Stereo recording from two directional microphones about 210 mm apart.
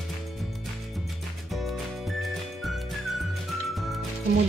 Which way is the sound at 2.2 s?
Centre (ahead or behind).